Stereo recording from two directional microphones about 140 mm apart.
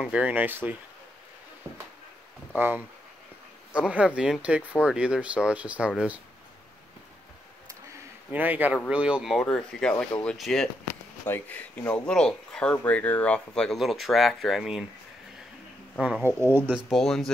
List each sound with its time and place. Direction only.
0.0 s speech: 10° right (ahead or behind)
2.5 s speech: 10° right (ahead or behind)
8.3 s speech: 10° right (ahead or behind)
10.9 s speech: 15° left (ahead or behind); by 14.9 s centre (ahead or behind)
16.0 s speech: 10° right (ahead or behind)
16.9 s speech: centre (ahead or behind)